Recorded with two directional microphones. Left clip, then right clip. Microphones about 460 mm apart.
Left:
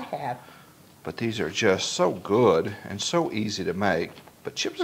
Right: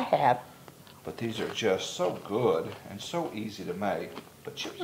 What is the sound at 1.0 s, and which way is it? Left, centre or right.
Speech, left.